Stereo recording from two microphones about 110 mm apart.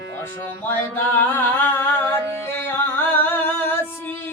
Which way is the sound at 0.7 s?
15° left (ahead or behind).